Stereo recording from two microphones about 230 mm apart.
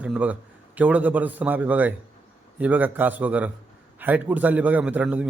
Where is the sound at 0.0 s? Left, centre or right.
Centre.